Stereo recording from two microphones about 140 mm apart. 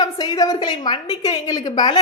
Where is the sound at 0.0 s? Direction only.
30° left (ahead or behind).